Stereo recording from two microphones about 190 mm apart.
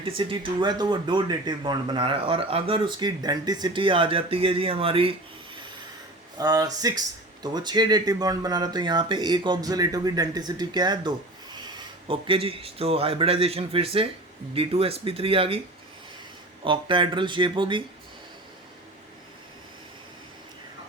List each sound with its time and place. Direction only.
0.0 s speech: 30° right (ahead or behind)
6.3 s speech: 20° right (ahead or behind)
16.6 s speech: 25° right (ahead or behind)